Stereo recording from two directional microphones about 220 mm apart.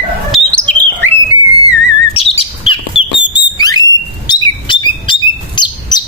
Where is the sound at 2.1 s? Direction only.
25° left (ahead or behind).